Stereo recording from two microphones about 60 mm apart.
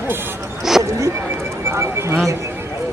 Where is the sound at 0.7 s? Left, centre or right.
Centre.